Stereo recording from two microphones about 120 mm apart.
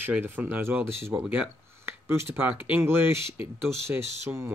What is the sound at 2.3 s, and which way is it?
Speech, 15° right (ahead or behind).